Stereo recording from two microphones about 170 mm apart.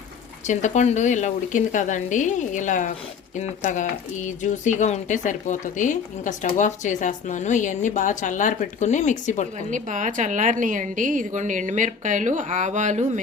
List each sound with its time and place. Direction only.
0.4 s speech: 45° left (ahead or behind)
9.6 s a woman's voice: 50° right (ahead or behind)